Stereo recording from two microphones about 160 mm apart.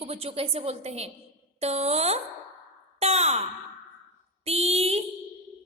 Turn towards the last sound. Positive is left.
turn(degrees=-40)  # may be behind; listen again after turning